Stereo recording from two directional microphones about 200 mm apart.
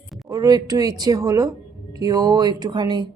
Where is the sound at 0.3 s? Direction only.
20° right (ahead or behind).